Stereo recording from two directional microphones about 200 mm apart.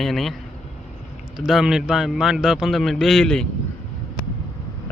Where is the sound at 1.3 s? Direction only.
Centre (ahead or behind).